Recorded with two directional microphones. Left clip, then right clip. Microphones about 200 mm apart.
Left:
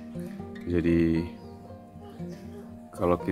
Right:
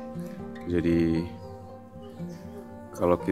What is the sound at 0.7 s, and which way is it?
Speech, 15° right (ahead or behind).